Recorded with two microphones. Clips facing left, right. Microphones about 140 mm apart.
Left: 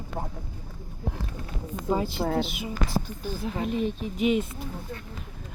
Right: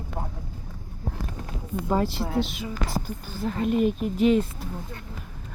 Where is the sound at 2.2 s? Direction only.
45° left (ahead or behind).